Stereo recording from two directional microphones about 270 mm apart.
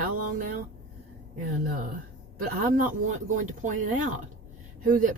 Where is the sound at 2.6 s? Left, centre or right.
Right.